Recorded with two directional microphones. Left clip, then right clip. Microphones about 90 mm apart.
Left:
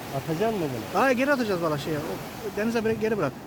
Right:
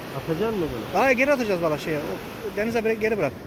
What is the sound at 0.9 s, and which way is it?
Speech, 30° left (ahead or behind).